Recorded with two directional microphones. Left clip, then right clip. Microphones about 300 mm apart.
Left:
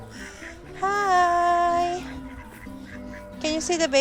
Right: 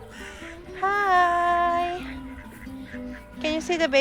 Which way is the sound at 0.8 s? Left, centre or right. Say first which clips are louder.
Even; centre.